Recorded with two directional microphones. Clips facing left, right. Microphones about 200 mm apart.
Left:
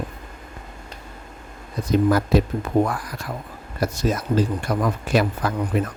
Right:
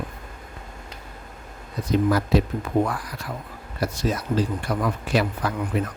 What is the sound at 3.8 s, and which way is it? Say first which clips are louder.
Speech: left 2 dB; 45° left (ahead or behind).